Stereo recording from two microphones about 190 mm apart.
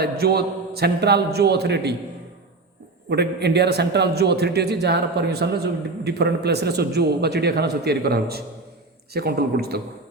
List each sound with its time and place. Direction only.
0.0 s a man's voice: 55° right (ahead or behind)
3.1 s a man's voice: 60° right (ahead or behind)